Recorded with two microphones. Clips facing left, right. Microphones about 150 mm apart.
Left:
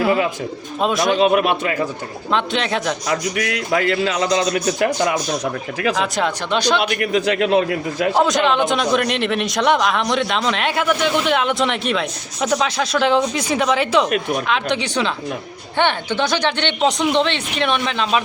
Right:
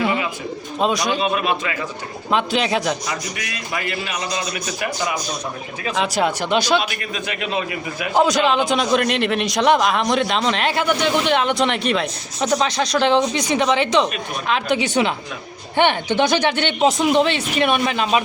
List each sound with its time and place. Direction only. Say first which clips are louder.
0.8 s a man's voice: left 2 dB; centre (ahead or behind)
1.1 s speech: left 5 dB; 70° left (ahead or behind)
2.3 s a man's voice: right 1 dB; 5° right (ahead or behind)
3.3 s a man's voice: left 8 dB; 85° left; by 5.2 s 60° left (ahead or behind)
5.9 s a man's voice: right 1 dB; centre (ahead or behind)
6.2 s speech: even; 10° right (ahead or behind)
6.7 s a man's voice: left 4 dB; 75° left (ahead or behind)
8.2 s a man's voice: right 2 dB; centre (ahead or behind)